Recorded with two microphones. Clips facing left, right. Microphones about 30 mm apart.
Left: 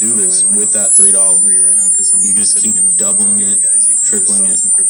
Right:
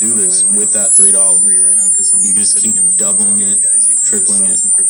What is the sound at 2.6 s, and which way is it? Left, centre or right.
A man's voice, centre.